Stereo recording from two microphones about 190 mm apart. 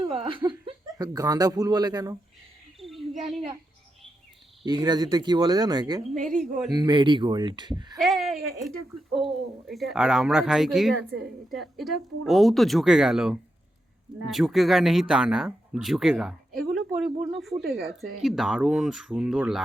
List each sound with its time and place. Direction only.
0.1 s speech: 25° right (ahead or behind)
2.7 s a sound: centre (ahead or behind)
4.6 s speech: 20° right (ahead or behind)
7.9 s speech: centre (ahead or behind)